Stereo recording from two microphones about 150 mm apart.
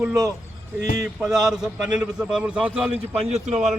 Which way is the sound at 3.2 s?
45° right (ahead or behind).